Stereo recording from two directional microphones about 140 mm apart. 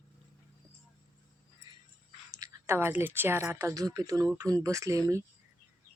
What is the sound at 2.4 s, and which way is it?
A woman's voice, 20° right (ahead or behind).